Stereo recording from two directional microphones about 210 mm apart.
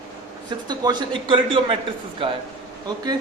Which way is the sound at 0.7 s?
20° right (ahead or behind).